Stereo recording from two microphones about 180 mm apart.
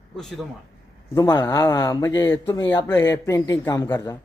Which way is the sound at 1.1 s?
20° left (ahead or behind).